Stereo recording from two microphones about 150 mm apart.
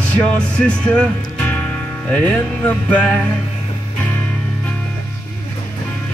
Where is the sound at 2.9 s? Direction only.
10° left (ahead or behind).